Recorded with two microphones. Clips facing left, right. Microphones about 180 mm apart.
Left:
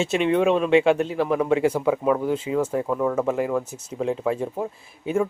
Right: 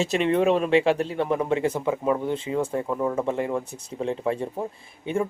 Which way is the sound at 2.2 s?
30° right (ahead or behind).